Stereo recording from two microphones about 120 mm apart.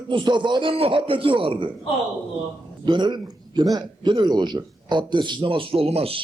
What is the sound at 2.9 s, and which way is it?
A man's voice, 40° right (ahead or behind).